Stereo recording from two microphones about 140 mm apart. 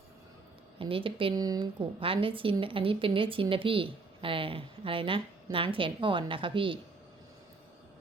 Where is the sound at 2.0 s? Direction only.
40° right (ahead or behind).